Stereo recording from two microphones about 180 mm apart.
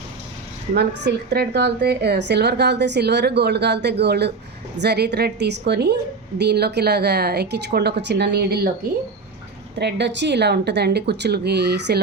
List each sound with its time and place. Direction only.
0.7 s a woman's voice: 70° right (ahead or behind)
9.7 s speech: 70° right (ahead or behind)